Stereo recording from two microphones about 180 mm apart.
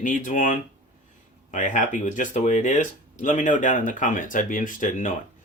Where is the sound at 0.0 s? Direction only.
45° left (ahead or behind).